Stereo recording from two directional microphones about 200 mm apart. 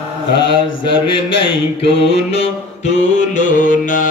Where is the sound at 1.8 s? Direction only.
30° left (ahead or behind).